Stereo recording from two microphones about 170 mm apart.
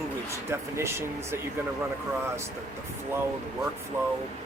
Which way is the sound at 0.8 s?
15° right (ahead or behind).